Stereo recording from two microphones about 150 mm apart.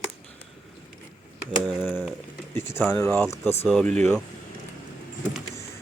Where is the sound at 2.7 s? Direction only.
15° left (ahead or behind).